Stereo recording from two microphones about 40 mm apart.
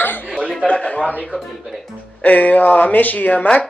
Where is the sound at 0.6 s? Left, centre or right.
Left.